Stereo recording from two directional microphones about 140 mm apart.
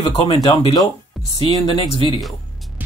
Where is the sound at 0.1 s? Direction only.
40° left (ahead or behind).